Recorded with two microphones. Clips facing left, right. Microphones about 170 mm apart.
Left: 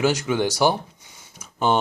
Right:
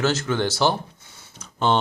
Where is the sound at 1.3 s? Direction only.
10° left (ahead or behind).